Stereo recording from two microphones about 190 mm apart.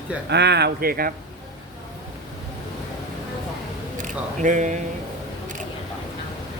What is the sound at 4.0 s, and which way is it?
Speech, 40° right (ahead or behind).